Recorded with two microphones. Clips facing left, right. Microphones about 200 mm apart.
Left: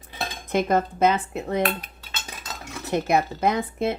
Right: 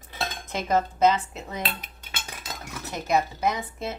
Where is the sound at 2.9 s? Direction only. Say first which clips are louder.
Left 3 dB; 60° left (ahead or behind).